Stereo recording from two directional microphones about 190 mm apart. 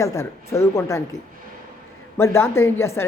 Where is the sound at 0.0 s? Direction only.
15° left (ahead or behind).